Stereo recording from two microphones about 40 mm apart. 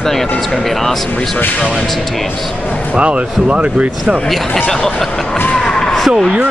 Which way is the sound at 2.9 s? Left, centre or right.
Right.